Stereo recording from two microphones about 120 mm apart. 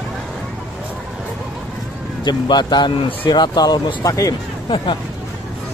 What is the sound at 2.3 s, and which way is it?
Speech, 35° left (ahead or behind).